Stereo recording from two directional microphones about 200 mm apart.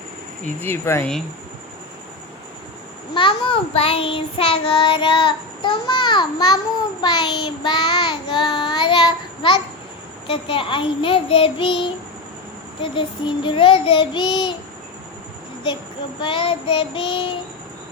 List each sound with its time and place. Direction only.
0.6 s speech: 10° left (ahead or behind)
3.2 s child singing: 25° left (ahead or behind)
10.2 s child singing: 25° left (ahead or behind)
16.2 s child singing: 25° left (ahead or behind)